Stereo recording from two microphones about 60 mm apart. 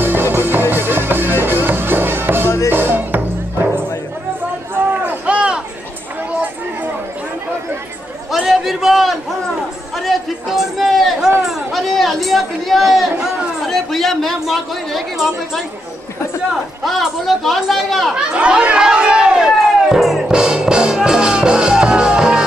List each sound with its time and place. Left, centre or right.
0.0 s music: right
5.0 s a sound: right
8.4 s a sound: centre
13.7 s speech: centre
16.8 s speech: centre
18.1 s chatter: centre
20.2 s music: centre